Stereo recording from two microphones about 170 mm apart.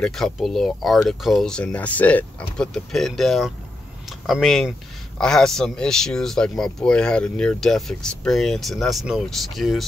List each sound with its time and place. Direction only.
0.0 s speech: centre (ahead or behind)